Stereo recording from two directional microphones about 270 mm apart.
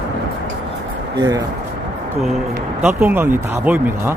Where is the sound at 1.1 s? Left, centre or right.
Centre.